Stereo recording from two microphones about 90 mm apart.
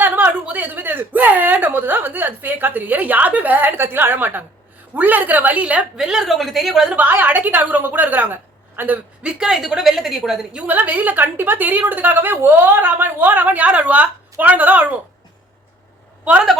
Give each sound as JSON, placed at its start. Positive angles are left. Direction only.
{"t": 0.0, "sound": "a woman's voice", "side_deg": -20}
{"t": 6.9, "sound": "a woman's voice", "side_deg": -20}
{"t": 10.6, "sound": "a woman's voice", "side_deg": -15}
{"t": 16.2, "sound": "a woman's voice", "side_deg": -15}